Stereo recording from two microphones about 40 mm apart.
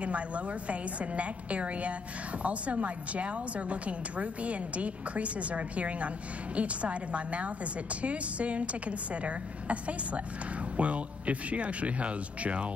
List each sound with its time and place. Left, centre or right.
0.0 s a woman's voice: right